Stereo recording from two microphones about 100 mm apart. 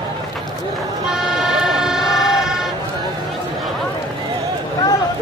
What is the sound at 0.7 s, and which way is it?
Vehicle, 5° right (ahead or behind).